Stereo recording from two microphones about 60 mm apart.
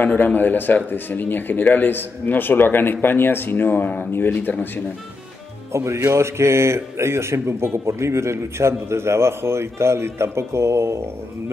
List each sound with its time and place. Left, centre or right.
0.0 s speech: left
5.7 s speech: right